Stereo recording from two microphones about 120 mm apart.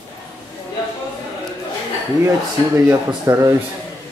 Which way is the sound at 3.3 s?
25° right (ahead or behind).